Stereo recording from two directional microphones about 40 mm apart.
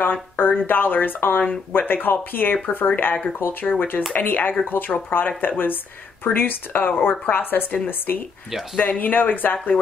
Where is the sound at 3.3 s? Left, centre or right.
Left.